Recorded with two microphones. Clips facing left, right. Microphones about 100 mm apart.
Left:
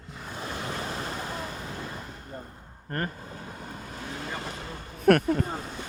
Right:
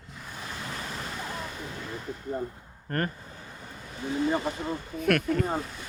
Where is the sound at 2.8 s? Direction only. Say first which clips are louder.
Right 2 dB; 20° left (ahead or behind).